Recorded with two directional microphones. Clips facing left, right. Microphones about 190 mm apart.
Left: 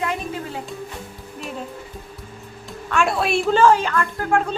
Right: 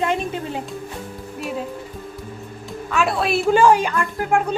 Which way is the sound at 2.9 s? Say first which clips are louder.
Even; centre (ahead or behind).